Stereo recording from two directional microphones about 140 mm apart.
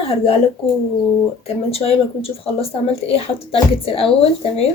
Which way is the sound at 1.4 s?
45° left (ahead or behind).